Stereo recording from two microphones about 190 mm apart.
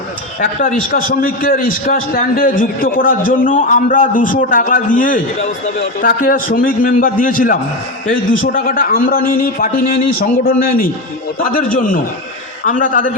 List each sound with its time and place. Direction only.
0.3 s a man's voice: 45° left (ahead or behind)